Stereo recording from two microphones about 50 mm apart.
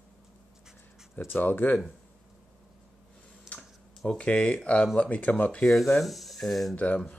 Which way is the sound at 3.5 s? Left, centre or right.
Centre.